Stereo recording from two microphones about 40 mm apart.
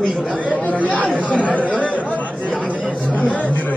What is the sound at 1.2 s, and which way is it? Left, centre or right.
Speech, left.